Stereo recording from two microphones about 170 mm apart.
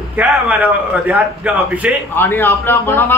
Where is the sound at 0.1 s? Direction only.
5° right (ahead or behind).